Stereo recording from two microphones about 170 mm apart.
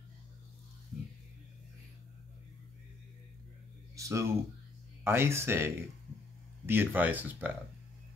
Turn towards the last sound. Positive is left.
turn(degrees=-10)  # may be behind; listen again after turning